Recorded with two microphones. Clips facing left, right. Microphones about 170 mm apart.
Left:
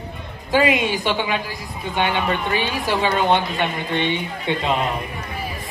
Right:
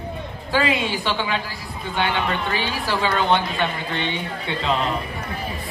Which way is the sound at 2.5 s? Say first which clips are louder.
Left 3 dB; 15° left (ahead or behind).